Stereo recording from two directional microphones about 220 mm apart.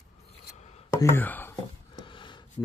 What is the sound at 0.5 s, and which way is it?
Chopping, 30° left (ahead or behind).